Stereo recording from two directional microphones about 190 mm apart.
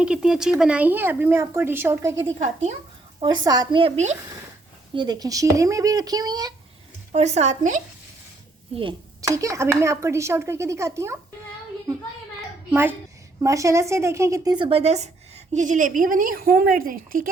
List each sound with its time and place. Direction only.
0.0 s speech: 5° right (ahead or behind)
3.2 s speech: 20° right (ahead or behind)
4.9 s speech: 20° right (ahead or behind)
7.1 s a woman's voice: 35° right (ahead or behind)
8.7 s speech: 25° right (ahead or behind)
13.4 s a woman's voice: 15° right (ahead or behind); by 17.2 s 45° right (ahead or behind)